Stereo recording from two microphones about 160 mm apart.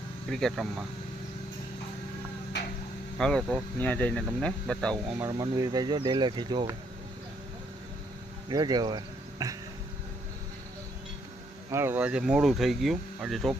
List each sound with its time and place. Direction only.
0.3 s speech: centre (ahead or behind)
3.2 s speech: 5° left (ahead or behind)
5.2 s speech: 20° right (ahead or behind)
8.4 s speech: 25° right (ahead or behind)
11.7 s speech: 15° right (ahead or behind)